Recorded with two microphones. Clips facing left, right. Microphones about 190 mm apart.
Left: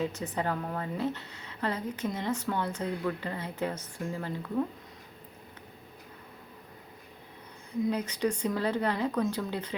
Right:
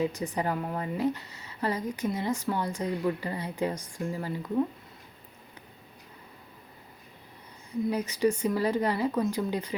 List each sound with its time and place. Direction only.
0.0 s a woman's voice: 10° right (ahead or behind)
7.9 s a woman's voice: 10° right (ahead or behind)